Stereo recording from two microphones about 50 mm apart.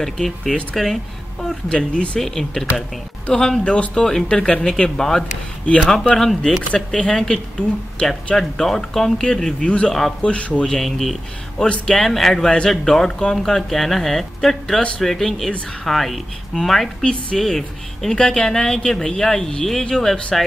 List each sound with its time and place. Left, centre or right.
0.0 s speech: centre
1.7 s speech: centre
2.1 s speech: centre
8.4 s speech: centre; by 10.7 s left
10.7 s speech: centre
11.5 s speech: centre
17.0 s speech: centre
17.4 s speech: centre